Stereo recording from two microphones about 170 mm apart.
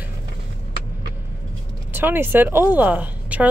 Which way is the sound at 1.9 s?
10° right (ahead or behind).